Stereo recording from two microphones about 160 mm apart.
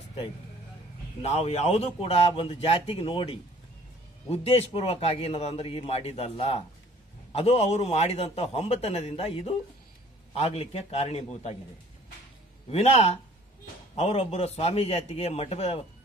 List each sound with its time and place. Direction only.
1.2 s a man's voice: 40° left (ahead or behind)
12.6 s a man's voice: 40° left (ahead or behind)